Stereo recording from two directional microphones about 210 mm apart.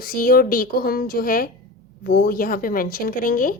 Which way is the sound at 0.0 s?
45° left (ahead or behind).